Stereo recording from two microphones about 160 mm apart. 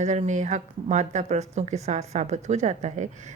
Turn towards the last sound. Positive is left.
turn(degrees=-45)  # may be behind; listen again after turning